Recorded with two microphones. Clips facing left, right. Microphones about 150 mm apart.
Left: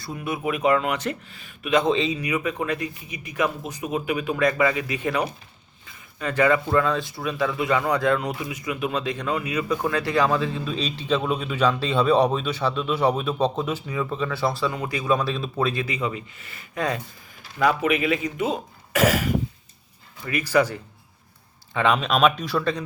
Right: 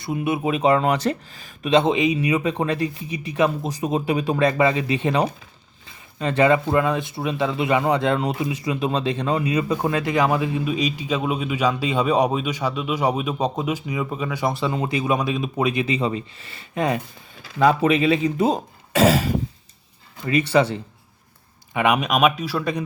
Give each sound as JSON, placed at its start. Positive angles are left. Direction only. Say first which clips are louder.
{"t": 0.0, "sound": "speech", "louder": "right 5 dB", "side_deg": -20}
{"t": 1.9, "sound": "speech", "louder": "right 2 dB", "side_deg": -15}
{"t": 2.1, "sound": "speech", "louder": "right 5 dB", "side_deg": -30}
{"t": 16.0, "sound": "speech", "louder": "right 4 dB", "side_deg": -30}